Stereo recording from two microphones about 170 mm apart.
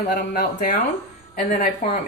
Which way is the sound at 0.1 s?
55° left (ahead or behind).